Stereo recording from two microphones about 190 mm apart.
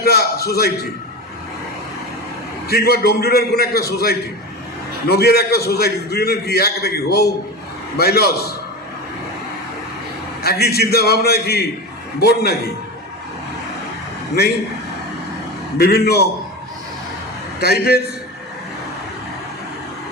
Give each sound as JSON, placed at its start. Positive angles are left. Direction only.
{"t": 0.0, "sound": "a sound", "side_deg": 55}
{"t": 2.6, "sound": "a man's voice", "side_deg": 55}
{"t": 10.4, "sound": "a man's voice", "side_deg": 55}
{"t": 15.8, "sound": "a man's voice", "side_deg": 55}
{"t": 17.6, "sound": "a man's voice", "side_deg": 55}